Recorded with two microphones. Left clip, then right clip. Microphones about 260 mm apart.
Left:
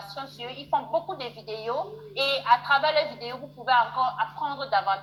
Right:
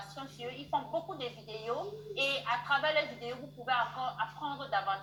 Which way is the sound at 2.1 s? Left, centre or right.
Left.